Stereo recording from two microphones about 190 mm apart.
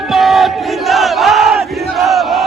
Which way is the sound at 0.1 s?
Centre (ahead or behind).